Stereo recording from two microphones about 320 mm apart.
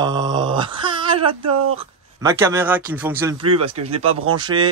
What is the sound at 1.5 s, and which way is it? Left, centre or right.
Speech, right.